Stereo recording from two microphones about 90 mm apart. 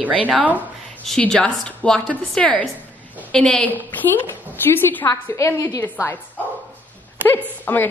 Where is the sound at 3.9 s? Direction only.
20° left (ahead or behind).